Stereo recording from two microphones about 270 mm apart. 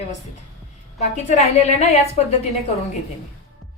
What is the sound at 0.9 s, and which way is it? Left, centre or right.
A woman's voice, left.